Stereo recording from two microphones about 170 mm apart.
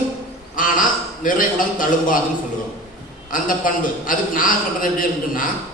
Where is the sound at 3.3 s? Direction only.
50° left (ahead or behind).